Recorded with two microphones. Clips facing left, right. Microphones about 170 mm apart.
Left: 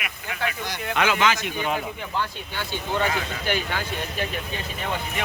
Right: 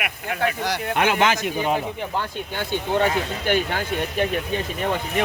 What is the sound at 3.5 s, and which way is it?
Speech, 50° right (ahead or behind).